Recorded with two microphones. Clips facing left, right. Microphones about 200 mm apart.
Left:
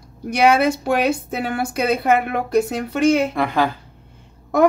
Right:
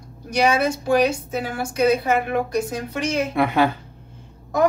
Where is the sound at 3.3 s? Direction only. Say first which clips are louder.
Right 1 dB; 5° right (ahead or behind).